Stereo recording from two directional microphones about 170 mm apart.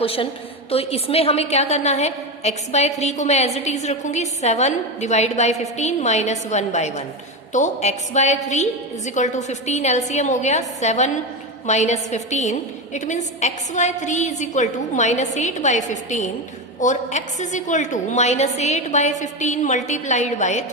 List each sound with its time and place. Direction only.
0.0 s a woman's voice: 35° left (ahead or behind)